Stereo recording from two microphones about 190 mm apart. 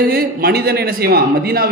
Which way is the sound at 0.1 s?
55° right (ahead or behind).